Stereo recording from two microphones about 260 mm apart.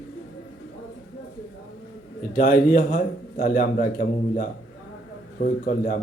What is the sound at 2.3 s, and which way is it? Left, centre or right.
A man's voice, left.